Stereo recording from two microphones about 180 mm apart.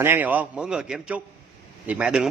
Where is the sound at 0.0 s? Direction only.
10° right (ahead or behind).